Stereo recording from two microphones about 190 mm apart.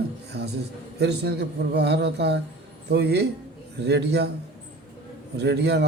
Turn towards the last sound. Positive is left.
turn(degrees=-60)  # may be behind; listen again after turning